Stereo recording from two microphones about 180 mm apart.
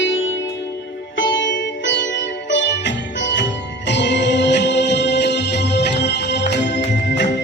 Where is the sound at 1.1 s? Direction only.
90° left.